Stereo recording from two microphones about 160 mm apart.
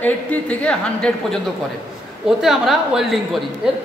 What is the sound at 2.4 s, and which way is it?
A woman's voice, centre (ahead or behind).